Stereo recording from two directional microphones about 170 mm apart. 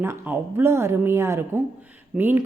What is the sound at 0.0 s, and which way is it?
Speech, 15° right (ahead or behind).